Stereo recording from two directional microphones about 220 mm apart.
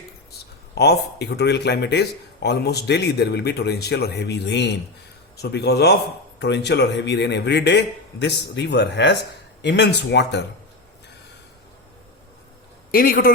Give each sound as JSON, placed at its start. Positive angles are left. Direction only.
{"t": 0.3, "sound": "speech", "side_deg": 50}
{"t": 12.9, "sound": "a man's voice", "side_deg": 40}